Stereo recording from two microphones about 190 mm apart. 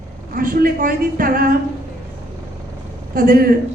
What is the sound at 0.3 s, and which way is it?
A man's voice, 50° right (ahead or behind).